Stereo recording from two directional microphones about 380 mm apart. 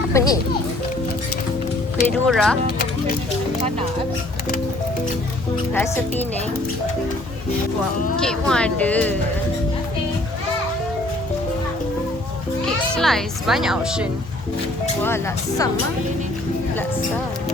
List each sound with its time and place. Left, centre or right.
0.1 s music: centre
2.0 s speech: centre
5.7 s speech: centre
8.2 s speech: centre
13.0 s speech: centre